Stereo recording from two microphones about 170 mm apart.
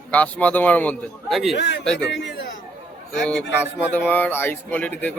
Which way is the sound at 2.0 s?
85° left.